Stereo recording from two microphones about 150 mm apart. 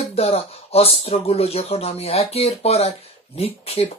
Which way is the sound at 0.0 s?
40° left (ahead or behind).